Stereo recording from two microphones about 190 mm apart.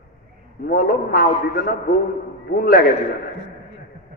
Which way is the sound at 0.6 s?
50° left (ahead or behind).